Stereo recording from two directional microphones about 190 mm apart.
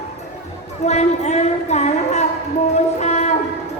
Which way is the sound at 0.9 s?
35° left (ahead or behind).